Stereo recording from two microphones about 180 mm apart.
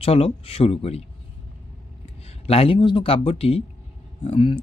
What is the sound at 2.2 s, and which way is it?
Speech, 35° left (ahead or behind).